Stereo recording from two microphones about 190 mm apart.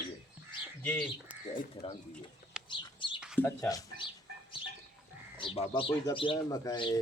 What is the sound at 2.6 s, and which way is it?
Bird, 25° left (ahead or behind).